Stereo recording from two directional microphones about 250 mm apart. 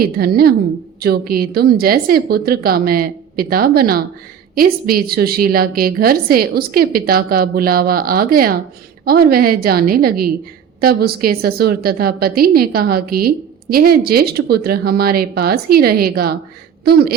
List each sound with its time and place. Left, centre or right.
0.0 s a woman's voice: right